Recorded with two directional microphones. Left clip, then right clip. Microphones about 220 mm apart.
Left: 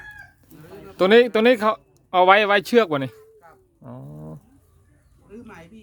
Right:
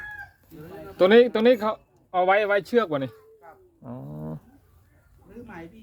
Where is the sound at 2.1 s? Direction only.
45° left (ahead or behind).